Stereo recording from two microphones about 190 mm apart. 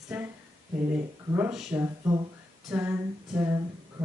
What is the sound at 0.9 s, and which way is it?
Speech, 10° right (ahead or behind).